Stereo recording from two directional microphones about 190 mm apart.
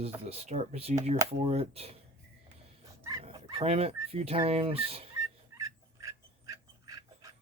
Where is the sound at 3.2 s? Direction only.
30° right (ahead or behind).